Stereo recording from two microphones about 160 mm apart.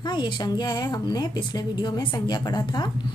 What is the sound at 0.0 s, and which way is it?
A woman's voice, 30° left (ahead or behind).